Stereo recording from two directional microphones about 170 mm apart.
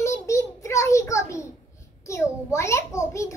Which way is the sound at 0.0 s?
15° left (ahead or behind).